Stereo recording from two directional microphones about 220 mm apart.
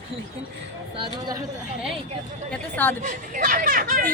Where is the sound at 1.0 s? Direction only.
20° right (ahead or behind).